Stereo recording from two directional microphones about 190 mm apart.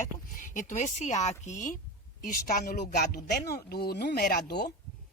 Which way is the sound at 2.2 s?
50° left (ahead or behind).